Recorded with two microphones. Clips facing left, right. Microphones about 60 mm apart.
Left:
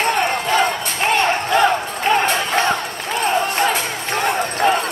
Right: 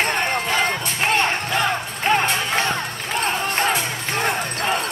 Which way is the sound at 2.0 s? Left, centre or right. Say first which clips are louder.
Left 2 dB; centre.